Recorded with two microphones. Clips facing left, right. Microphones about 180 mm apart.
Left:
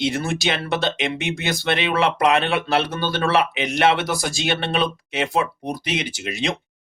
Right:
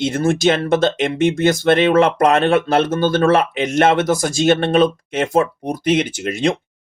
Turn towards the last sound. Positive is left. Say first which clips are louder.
# right 7 dB
turn(degrees=-50)  # may be behind; listen again after turning